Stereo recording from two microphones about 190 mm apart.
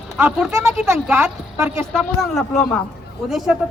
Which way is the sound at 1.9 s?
Centre (ahead or behind).